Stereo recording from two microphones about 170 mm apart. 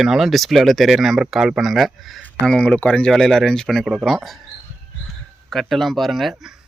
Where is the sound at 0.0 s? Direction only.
Centre (ahead or behind).